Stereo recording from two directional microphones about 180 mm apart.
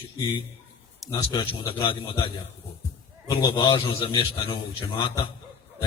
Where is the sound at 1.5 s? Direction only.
30° left (ahead or behind).